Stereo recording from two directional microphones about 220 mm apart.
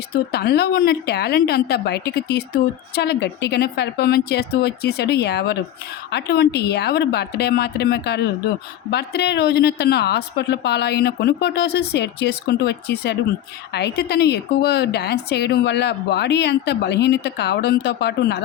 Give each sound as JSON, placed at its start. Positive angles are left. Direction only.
{"t": 0.3, "sound": "a woman's voice", "side_deg": 45}